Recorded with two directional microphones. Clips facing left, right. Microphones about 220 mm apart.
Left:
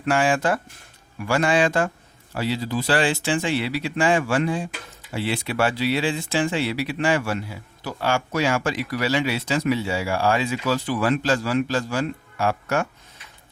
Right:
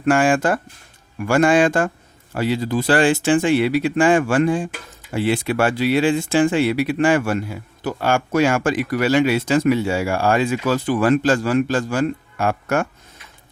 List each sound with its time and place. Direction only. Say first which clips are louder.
0.0 s speech: right 5 dB; 50° right (ahead or behind)